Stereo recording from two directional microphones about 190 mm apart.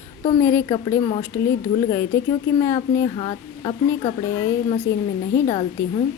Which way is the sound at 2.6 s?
15° left (ahead or behind).